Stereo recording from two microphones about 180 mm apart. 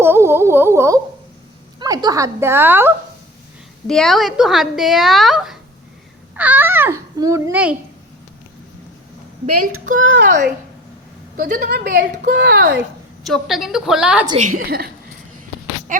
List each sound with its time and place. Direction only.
0.0 s a sound: 15° right (ahead or behind)
1.8 s a child's voice: 20° right (ahead or behind)
3.8 s a woman's voice: centre (ahead or behind)
10.0 s a child's voice: 90° right
11.3 s speech: 55° right (ahead or behind)
13.2 s a woman's voice: centre (ahead or behind)
14.3 s a woman's voice: 45° right (ahead or behind)
15.9 s a sound: 45° right (ahead or behind)